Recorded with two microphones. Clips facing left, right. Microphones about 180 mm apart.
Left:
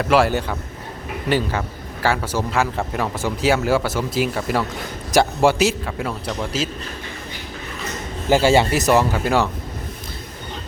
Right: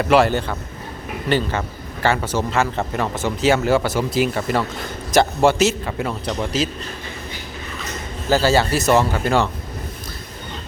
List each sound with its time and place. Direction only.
0.0 s a man's voice: centre (ahead or behind)
5.8 s speech: centre (ahead or behind)
8.3 s a man's voice: 20° left (ahead or behind)